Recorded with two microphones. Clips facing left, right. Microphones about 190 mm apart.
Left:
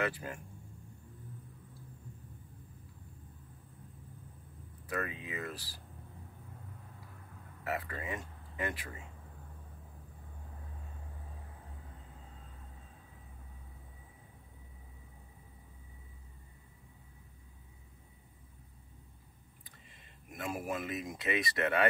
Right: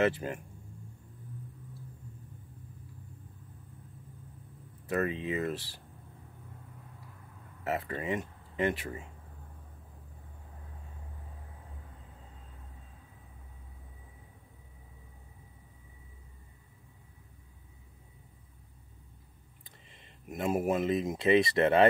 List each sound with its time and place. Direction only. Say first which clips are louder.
0.0 s speech: right 7 dB; 25° right (ahead or behind)
4.8 s speech: right 8 dB; 25° right (ahead or behind)
7.6 s speech: right 5 dB; 25° right (ahead or behind)
20.3 s speech: right 9 dB; 25° right (ahead or behind)